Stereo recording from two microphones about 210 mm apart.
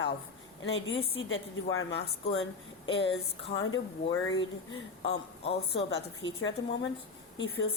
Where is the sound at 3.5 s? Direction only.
65° left (ahead or behind).